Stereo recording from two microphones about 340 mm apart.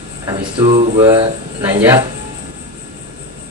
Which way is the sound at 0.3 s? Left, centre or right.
Centre.